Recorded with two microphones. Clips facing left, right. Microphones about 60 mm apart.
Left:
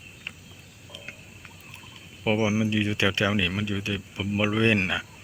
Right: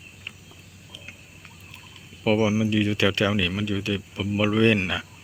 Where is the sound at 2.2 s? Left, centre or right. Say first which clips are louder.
Right 3 dB; centre.